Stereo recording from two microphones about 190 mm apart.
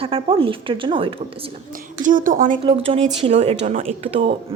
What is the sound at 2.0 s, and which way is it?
Speech, 45° right (ahead or behind).